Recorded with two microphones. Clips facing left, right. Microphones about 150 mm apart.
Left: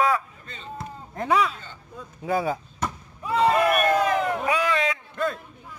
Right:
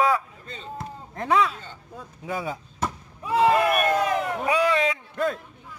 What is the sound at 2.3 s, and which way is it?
Speech, 40° left (ahead or behind).